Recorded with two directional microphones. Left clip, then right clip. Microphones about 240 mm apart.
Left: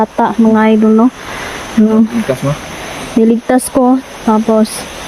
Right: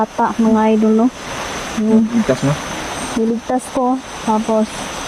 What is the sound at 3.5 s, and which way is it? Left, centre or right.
Speech, left.